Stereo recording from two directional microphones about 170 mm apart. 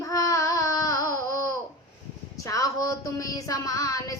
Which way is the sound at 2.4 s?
20° left (ahead or behind).